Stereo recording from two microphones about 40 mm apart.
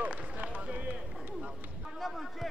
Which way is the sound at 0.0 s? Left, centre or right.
Right.